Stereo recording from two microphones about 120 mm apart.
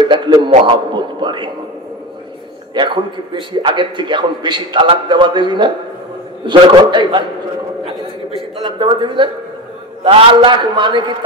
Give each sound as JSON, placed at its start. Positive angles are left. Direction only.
{"t": 0.0, "sound": "a man's voice", "side_deg": -40}
{"t": 2.7, "sound": "a man's voice", "side_deg": -40}
{"t": 8.6, "sound": "a man's voice", "side_deg": -40}